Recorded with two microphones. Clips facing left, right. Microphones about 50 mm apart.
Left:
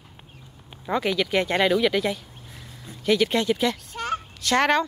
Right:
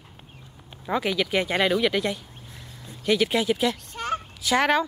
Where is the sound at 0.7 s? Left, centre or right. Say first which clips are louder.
Left 1 dB; centre.